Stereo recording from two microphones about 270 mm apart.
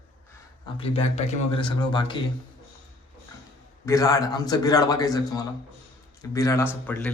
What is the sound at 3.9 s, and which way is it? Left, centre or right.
A man's voice, centre.